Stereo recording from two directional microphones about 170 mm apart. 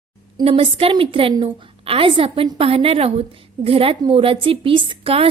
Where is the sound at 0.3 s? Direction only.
35° right (ahead or behind).